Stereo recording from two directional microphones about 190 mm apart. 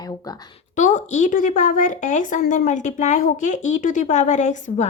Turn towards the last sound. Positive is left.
turn(degrees=40)  # may be behind; listen again after turning